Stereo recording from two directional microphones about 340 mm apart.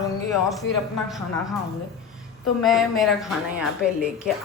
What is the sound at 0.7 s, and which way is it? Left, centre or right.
Speech, left.